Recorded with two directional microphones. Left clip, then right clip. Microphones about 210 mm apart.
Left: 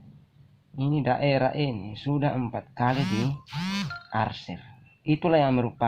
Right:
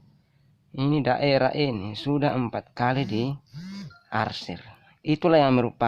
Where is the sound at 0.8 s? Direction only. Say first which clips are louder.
Right 2 dB; 35° right (ahead or behind).